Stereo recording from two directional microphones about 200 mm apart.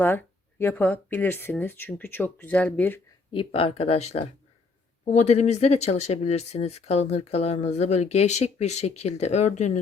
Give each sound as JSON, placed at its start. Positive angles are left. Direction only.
{"t": 0.0, "sound": "speech", "side_deg": 10}
{"t": 3.3, "sound": "speech", "side_deg": 30}